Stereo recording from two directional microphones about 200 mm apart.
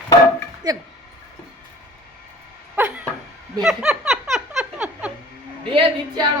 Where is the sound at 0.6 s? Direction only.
20° right (ahead or behind).